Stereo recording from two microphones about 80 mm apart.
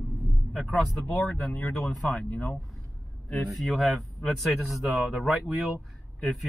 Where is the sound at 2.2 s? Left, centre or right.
Centre.